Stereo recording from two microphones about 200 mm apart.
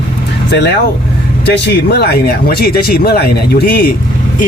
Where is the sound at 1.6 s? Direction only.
55° left (ahead or behind).